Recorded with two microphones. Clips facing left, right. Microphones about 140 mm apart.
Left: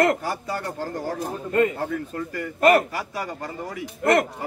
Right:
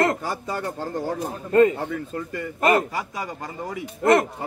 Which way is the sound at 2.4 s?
20° right (ahead or behind).